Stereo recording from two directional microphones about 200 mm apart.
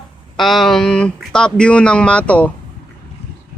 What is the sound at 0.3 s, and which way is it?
Speech, centre (ahead or behind).